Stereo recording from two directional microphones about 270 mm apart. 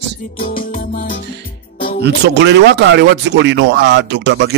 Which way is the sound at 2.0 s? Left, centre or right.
Right.